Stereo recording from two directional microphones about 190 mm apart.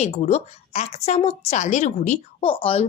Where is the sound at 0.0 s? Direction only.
35° left (ahead or behind).